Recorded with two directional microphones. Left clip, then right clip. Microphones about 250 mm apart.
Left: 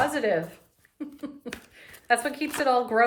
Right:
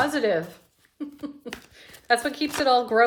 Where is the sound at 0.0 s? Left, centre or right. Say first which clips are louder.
Right 1 dB; centre.